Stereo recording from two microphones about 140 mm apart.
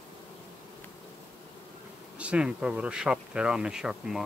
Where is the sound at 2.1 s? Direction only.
10° right (ahead or behind).